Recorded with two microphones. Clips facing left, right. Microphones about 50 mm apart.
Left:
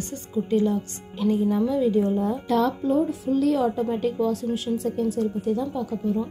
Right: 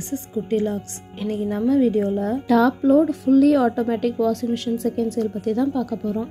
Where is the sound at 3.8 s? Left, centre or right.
Right.